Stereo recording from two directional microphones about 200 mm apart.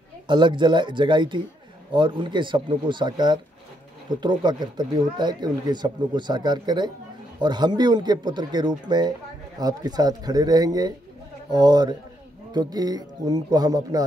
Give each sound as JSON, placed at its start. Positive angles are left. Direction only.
{"t": 0.3, "sound": "speech", "side_deg": -25}